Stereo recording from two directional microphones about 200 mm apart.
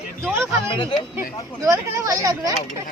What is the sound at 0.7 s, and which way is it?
Speech, 25° left (ahead or behind).